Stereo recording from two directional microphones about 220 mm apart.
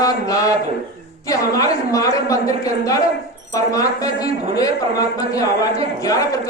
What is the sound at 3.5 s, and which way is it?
A man's voice, 15° left (ahead or behind).